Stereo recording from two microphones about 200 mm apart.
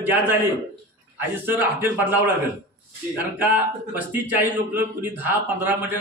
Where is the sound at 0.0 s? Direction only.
10° right (ahead or behind).